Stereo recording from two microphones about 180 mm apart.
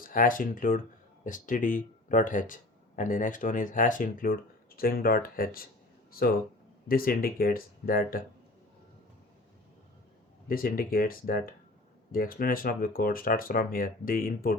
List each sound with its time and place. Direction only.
0.0 s speech: 50° left (ahead or behind)
10.5 s speech: 55° left (ahead or behind)